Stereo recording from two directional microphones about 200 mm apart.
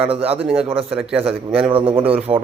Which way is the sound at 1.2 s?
30° right (ahead or behind).